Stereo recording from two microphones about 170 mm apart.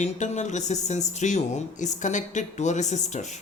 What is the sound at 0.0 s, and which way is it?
Speech, 45° left (ahead or behind).